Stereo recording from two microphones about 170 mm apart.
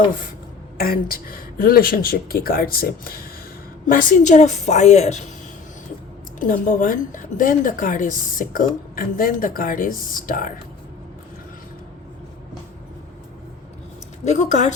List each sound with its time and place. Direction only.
0.8 s a woman's voice: 60° left (ahead or behind); by 5.3 s 40° left (ahead or behind)
6.4 s a woman's voice: 50° left (ahead or behind)
14.3 s a woman's voice: 45° left (ahead or behind)